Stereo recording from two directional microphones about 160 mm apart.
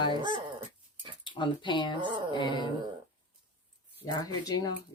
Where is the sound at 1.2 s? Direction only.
30° left (ahead or behind).